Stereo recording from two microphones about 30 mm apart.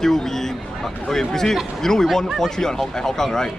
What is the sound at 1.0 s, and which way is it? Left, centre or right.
A man's voice, centre.